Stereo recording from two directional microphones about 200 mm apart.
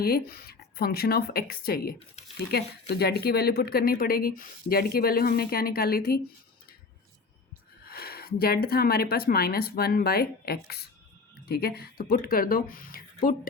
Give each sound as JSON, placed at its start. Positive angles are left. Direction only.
{"t": 0.0, "sound": "speech", "side_deg": 50}
{"t": 7.9, "sound": "speech", "side_deg": 50}